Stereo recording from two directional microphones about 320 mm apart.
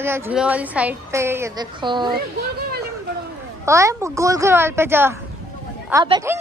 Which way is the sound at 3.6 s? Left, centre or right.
Centre.